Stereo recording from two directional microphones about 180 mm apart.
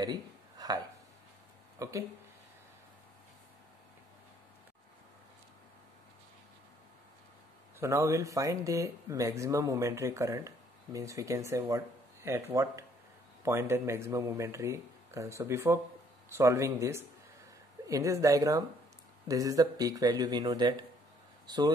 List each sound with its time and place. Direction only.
0.0 s a sound: 20° right (ahead or behind)
1.8 s speech: 15° right (ahead or behind)
7.8 s speech: 15° right (ahead or behind)